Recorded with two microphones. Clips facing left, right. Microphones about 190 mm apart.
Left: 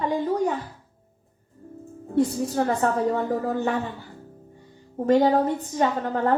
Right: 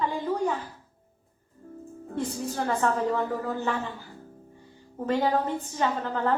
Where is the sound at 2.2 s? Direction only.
35° left (ahead or behind).